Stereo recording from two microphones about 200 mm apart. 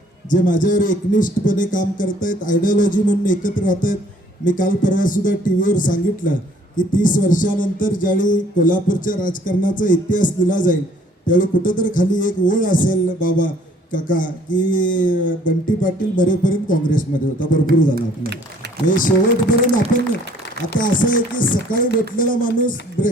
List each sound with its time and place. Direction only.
0.3 s a man's voice: 40° left (ahead or behind)
18.9 s speech: 40° left (ahead or behind)
20.7 s a man's voice: 45° left (ahead or behind)